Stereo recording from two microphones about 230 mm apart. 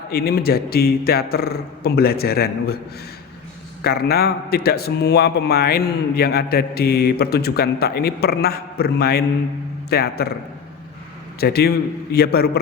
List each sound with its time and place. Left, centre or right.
0.1 s speech: left
3.8 s a man's voice: left
11.3 s a man's voice: left